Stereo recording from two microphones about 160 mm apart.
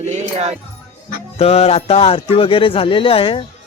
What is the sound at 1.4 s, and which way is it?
Speech, 40° left (ahead or behind).